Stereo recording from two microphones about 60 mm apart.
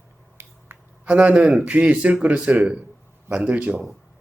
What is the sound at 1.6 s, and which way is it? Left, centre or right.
Speech, right.